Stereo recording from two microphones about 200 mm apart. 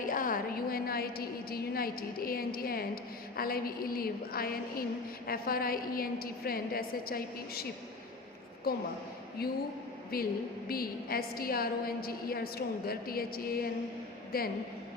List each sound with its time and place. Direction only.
0.0 s a woman's voice: 45° left (ahead or behind)